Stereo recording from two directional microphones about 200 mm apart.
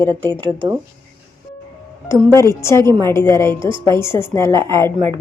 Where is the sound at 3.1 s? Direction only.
15° left (ahead or behind).